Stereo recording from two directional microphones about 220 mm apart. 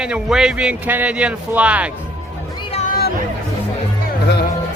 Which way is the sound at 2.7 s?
40° left (ahead or behind).